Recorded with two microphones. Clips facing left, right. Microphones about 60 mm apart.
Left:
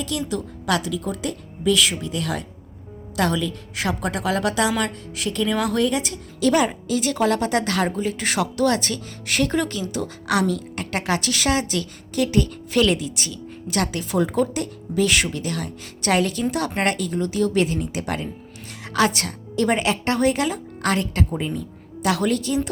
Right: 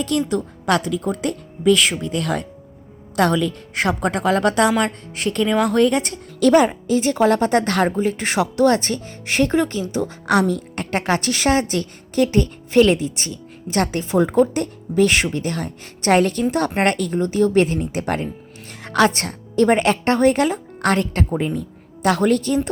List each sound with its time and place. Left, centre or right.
0.0 s a woman's voice: right